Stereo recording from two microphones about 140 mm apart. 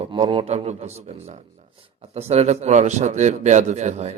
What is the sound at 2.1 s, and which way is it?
A man's voice, 50° right (ahead or behind).